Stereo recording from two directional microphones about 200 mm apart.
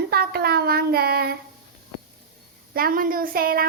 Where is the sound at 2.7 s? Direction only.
45° right (ahead or behind).